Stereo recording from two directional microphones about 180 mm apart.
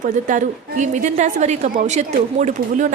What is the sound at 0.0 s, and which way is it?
A woman's voice, 45° right (ahead or behind).